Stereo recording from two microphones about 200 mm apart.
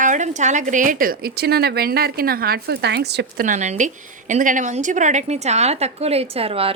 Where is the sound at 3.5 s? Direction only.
35° right (ahead or behind).